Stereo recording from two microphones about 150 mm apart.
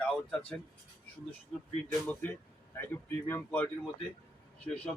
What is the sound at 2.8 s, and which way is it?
Speech, 15° left (ahead or behind).